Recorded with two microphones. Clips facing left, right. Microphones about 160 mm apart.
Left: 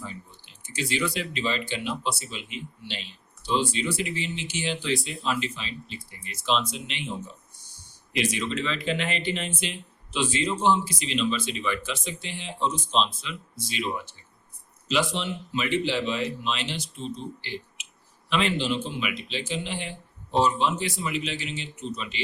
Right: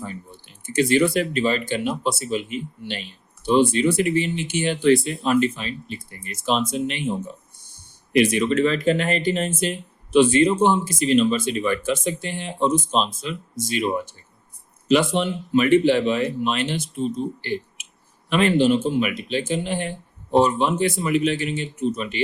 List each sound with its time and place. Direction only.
0.0 s speech: 55° right (ahead or behind)